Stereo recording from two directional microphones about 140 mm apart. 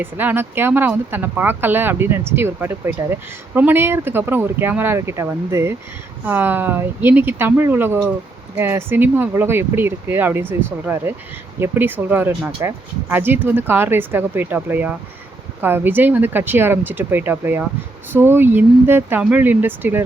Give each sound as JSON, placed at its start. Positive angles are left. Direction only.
{"t": 0.0, "sound": "speech", "side_deg": -15}